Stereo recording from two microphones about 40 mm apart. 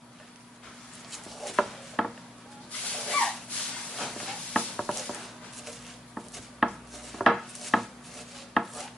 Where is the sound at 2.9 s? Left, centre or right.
Centre.